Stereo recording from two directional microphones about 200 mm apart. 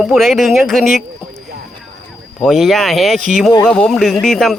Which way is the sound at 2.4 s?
Centre (ahead or behind).